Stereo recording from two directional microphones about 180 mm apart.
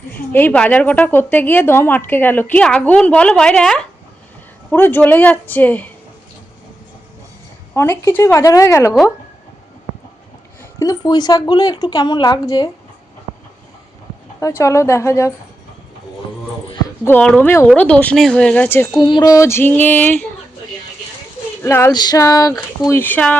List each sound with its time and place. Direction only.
0.3 s a woman's voice: 10° left (ahead or behind)
7.8 s a woman's voice: 15° left (ahead or behind)
10.8 s a woman's voice: 20° left (ahead or behind)
14.3 s a woman's voice: 15° left (ahead or behind)
17.0 s a woman's voice: 10° left (ahead or behind)
18.9 s a woman's voice: 25° left (ahead or behind); by 20.2 s 10° left (ahead or behind)
21.6 s a woman's voice: 15° left (ahead or behind)